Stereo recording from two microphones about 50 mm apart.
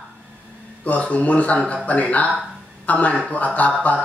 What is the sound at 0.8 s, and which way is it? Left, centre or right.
Speech, left.